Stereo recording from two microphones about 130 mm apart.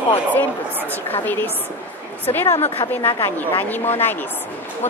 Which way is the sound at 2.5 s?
55° left (ahead or behind).